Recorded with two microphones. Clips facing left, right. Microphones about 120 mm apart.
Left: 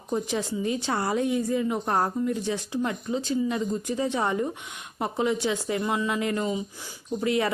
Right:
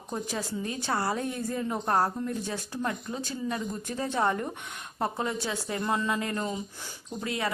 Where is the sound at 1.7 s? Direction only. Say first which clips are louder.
Left 1 dB; 15° left (ahead or behind).